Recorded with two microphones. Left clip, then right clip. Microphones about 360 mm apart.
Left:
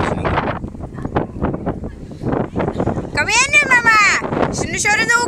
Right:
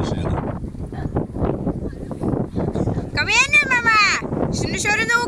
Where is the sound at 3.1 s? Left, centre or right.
Centre.